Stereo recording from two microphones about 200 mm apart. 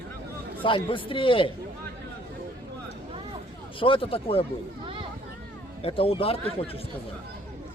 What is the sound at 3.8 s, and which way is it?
Speech, 25° left (ahead or behind).